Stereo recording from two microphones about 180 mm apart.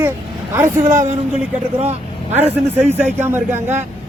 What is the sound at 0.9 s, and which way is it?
Speech, 45° right (ahead or behind).